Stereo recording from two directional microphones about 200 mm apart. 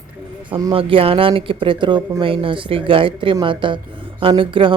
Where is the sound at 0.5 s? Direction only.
25° right (ahead or behind).